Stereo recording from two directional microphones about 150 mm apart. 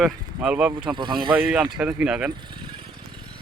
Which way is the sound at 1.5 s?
5° right (ahead or behind).